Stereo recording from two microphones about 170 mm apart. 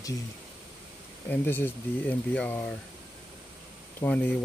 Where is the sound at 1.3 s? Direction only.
10° left (ahead or behind).